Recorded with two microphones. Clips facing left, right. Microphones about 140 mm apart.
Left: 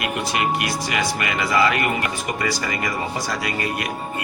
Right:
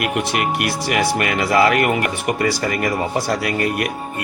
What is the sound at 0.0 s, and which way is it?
Speech, 65° right (ahead or behind).